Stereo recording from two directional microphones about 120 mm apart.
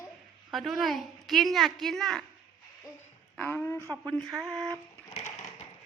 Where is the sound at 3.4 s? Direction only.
15° left (ahead or behind).